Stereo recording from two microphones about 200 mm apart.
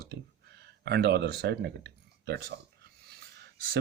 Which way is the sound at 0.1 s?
55° right (ahead or behind).